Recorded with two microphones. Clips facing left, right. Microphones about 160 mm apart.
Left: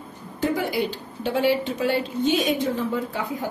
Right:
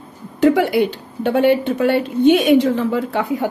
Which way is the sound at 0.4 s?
75° right (ahead or behind).